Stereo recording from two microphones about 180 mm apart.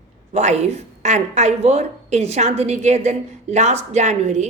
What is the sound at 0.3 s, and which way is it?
A woman's voice, 40° right (ahead or behind).